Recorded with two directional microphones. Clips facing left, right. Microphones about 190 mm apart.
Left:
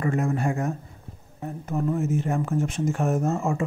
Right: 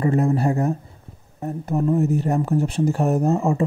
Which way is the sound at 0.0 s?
35° right (ahead or behind).